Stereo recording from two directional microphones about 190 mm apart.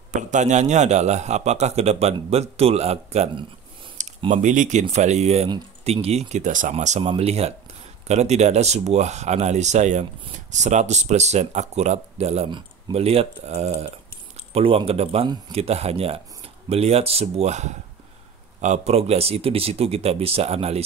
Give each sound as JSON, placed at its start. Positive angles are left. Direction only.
{"t": 0.1, "sound": "speech", "side_deg": -40}